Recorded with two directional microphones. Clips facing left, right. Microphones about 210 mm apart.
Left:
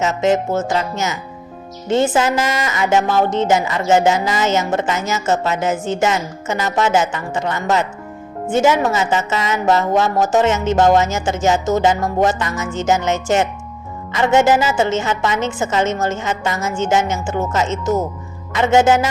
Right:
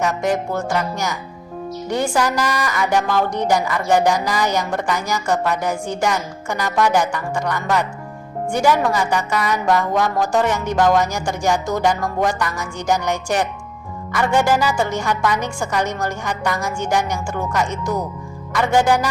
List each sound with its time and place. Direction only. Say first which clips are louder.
0.1 s a woman's voice: left 4 dB; 25° left (ahead or behind)